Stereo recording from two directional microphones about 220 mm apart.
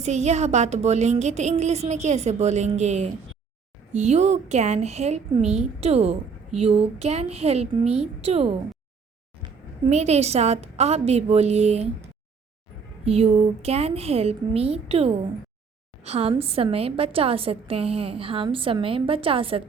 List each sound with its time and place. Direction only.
0.0 s a woman's voice: 30° right (ahead or behind)